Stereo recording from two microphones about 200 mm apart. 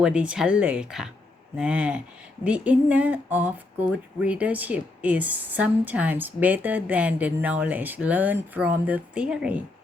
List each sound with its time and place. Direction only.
0.0 s speech: 5° right (ahead or behind)